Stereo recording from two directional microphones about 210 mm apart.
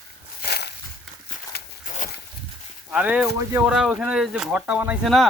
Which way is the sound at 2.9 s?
5° right (ahead or behind).